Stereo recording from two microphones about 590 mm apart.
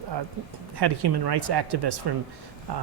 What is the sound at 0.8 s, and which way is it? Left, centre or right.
Speech, right.